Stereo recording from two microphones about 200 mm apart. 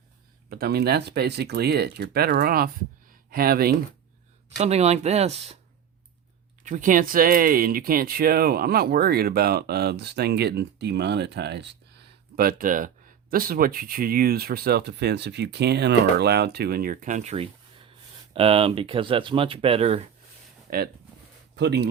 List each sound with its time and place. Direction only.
0.5 s speech: 50° right (ahead or behind)
4.5 s speech: 30° right (ahead or behind)
6.7 s speech: 40° right (ahead or behind)
20.7 s speech: 50° right (ahead or behind)